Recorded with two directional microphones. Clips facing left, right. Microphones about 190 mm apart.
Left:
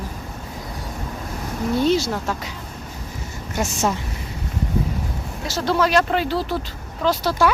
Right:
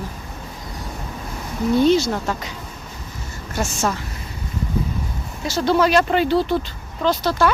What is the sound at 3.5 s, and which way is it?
Speech, 20° left (ahead or behind).